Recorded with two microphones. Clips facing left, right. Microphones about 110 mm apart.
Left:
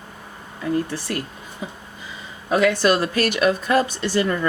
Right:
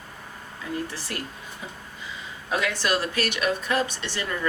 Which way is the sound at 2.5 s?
45° left (ahead or behind).